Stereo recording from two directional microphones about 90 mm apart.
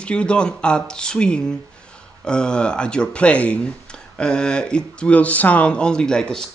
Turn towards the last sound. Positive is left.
turn(degrees=10)  # may be behind; listen again after turning